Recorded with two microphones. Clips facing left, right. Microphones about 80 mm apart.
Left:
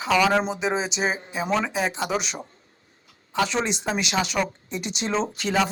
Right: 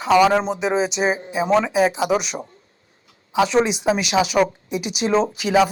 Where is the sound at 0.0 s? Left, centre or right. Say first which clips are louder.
Right 5 dB; centre.